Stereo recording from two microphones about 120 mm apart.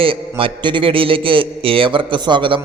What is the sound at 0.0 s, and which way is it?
A man's voice, 45° right (ahead or behind).